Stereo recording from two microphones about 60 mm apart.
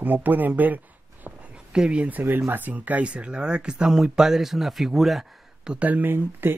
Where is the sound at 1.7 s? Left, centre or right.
Centre.